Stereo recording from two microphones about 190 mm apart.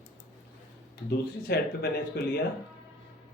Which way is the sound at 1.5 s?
55° left (ahead or behind).